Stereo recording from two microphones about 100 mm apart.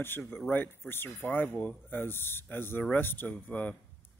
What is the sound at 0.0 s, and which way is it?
Speech, 20° left (ahead or behind).